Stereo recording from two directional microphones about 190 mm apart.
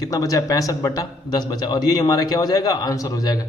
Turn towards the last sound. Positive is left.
turn(degrees=20)  # may be behind; listen again after turning